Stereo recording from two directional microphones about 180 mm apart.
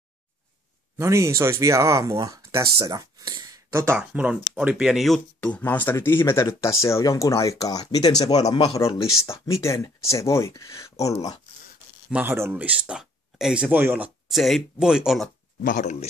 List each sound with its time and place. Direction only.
0.9 s speech: 15° right (ahead or behind); by 11.1 s 15° left (ahead or behind)
12.1 s speech: 10° right (ahead or behind)
15.6 s speech: 45° left (ahead or behind)